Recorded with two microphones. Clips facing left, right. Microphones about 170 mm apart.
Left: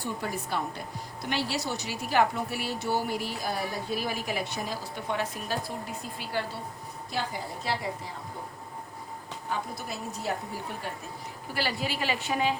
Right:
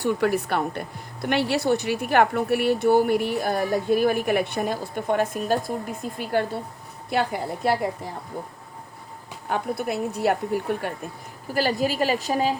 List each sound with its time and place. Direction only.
0.0 s speech: 75° right (ahead or behind); by 6.4 s 50° right (ahead or behind)
7.1 s speech: 60° right (ahead or behind)
9.5 s speech: 60° right (ahead or behind)
11.5 s a woman's voice: 45° right (ahead or behind)